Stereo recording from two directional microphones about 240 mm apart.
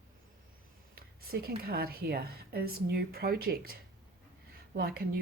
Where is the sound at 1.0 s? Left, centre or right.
Right.